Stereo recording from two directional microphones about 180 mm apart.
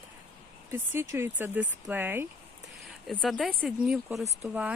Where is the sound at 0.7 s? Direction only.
15° right (ahead or behind).